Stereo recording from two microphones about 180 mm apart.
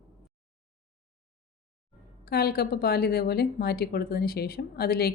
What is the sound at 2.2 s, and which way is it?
A woman's voice, 60° left (ahead or behind).